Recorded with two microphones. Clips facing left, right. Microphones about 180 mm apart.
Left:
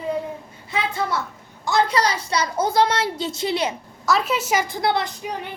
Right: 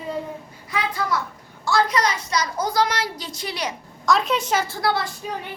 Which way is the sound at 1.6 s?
20° left (ahead or behind).